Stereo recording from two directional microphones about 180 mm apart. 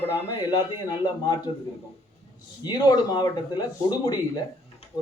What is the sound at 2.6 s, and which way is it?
Speech, 25° left (ahead or behind).